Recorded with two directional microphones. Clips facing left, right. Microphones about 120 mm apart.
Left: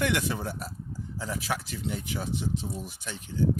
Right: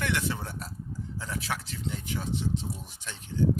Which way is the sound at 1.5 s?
10° left (ahead or behind).